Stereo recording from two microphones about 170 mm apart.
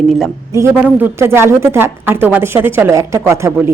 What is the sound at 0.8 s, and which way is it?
A woman's voice, 10° right (ahead or behind).